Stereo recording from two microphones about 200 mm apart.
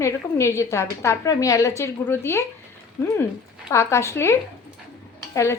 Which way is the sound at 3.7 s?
15° left (ahead or behind).